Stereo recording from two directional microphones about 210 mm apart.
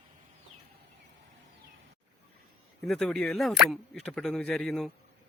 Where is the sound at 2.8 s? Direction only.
Centre (ahead or behind).